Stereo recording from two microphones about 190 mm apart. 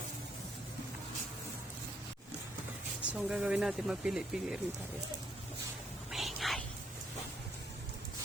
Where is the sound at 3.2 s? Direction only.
5° right (ahead or behind).